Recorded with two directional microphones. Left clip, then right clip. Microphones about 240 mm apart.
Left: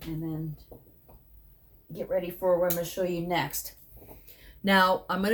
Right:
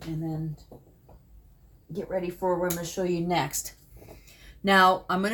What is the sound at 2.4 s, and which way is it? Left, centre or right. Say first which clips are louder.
Speech: left 3 dB; centre.